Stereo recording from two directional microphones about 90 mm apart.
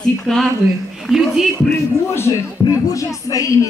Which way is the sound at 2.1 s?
35° left (ahead or behind).